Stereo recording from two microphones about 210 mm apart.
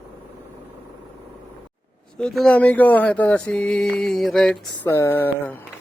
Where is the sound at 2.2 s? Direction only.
5° left (ahead or behind).